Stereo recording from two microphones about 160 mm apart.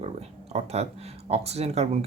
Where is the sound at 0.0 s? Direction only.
40° right (ahead or behind).